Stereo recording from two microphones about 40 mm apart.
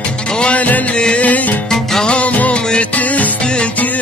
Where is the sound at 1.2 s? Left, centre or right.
Left.